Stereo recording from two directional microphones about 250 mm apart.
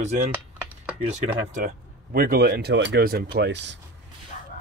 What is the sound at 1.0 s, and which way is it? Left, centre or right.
Speech, right.